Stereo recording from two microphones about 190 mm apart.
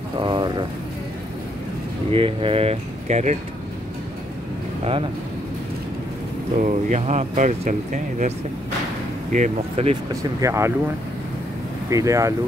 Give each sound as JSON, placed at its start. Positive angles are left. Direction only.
{"t": 0.2, "sound": "speech", "side_deg": -25}
{"t": 2.1, "sound": "speech", "side_deg": -30}
{"t": 6.5, "sound": "speech", "side_deg": -40}
{"t": 9.3, "sound": "speech", "side_deg": -35}
{"t": 10.4, "sound": "speech", "side_deg": -15}
{"t": 11.9, "sound": "speech", "side_deg": -15}